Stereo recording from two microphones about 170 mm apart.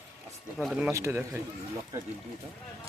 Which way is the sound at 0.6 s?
Centre (ahead or behind).